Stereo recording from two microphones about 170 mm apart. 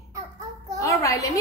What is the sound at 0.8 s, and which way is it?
Speech, 20° left (ahead or behind).